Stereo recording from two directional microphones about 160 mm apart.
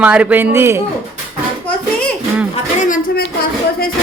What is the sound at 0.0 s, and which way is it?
Speech, 10° right (ahead or behind).